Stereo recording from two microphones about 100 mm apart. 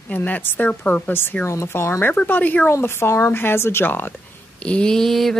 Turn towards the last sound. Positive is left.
turn(degrees=5)  # may be behind; listen again after turning